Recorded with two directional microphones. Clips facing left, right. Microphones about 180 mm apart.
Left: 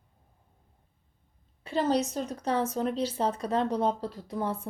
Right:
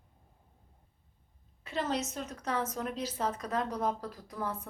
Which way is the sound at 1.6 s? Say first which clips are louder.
Left 7 dB; 30° left (ahead or behind).